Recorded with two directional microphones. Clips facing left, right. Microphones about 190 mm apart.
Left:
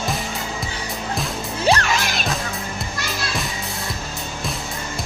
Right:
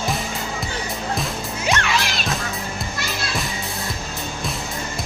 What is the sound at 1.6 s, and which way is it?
Music, 35° left (ahead or behind).